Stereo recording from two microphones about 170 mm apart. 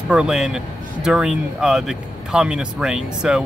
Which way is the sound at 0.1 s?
5° right (ahead or behind).